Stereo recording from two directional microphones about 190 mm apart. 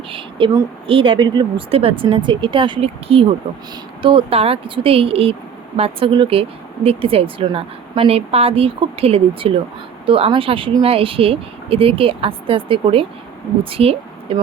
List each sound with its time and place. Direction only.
0.1 s a woman's voice: 25° right (ahead or behind)